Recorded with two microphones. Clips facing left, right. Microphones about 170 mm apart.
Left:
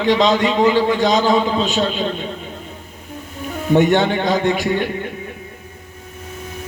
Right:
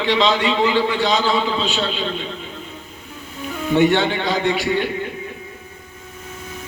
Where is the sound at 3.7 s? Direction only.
45° left (ahead or behind).